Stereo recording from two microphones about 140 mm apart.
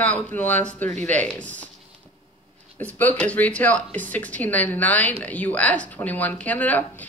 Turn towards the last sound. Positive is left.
turn(degrees=10)  # may be behind; listen again after turning